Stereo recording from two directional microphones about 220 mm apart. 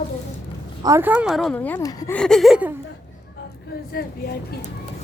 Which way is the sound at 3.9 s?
45° left (ahead or behind).